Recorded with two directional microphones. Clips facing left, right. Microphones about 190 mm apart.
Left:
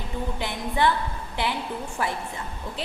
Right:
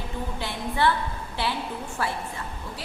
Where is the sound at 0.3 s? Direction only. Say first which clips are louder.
Left 1 dB; 15° left (ahead or behind).